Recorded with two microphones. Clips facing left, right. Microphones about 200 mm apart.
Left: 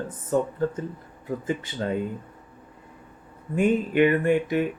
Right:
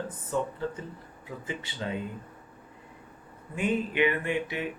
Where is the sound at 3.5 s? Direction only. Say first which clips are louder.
Left 7 dB; 45° left (ahead or behind).